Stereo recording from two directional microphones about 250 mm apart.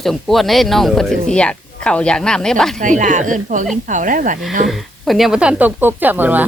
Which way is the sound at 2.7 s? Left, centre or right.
Right.